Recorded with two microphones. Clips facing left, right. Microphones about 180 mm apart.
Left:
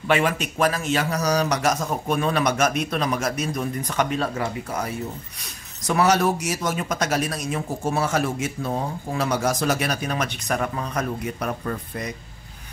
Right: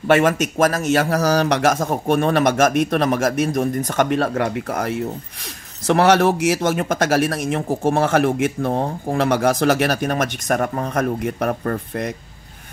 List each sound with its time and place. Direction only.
0.1 s a man's voice: 45° right (ahead or behind); by 6.3 s 65° right (ahead or behind)
6.8 s a man's voice: 55° right (ahead or behind)